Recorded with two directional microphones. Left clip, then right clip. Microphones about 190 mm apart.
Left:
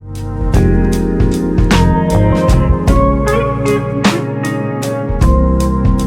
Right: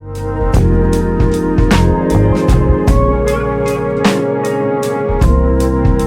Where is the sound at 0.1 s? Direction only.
Centre (ahead or behind).